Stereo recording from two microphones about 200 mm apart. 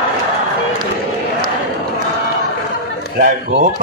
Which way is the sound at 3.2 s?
45° right (ahead or behind).